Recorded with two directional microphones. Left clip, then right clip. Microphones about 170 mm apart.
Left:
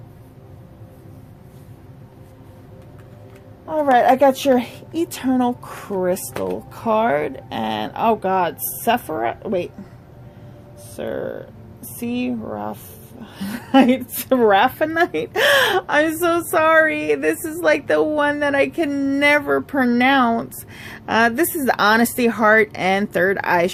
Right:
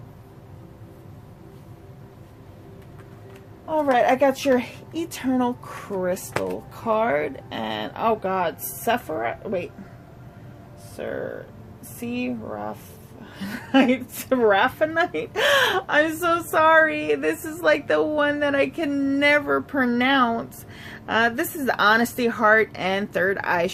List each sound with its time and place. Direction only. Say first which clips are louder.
3.7 s a woman's voice: left 4 dB; 45° left (ahead or behind)
10.9 s a woman's voice: left 4 dB; 55° left (ahead or behind)